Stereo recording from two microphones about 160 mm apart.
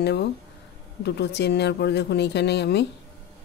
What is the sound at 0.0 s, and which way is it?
Speech, 90° left.